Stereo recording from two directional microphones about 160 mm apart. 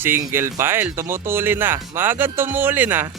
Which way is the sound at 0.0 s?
15° right (ahead or behind).